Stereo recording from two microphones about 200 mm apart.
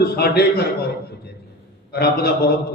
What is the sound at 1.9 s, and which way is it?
Speech, 55° left (ahead or behind).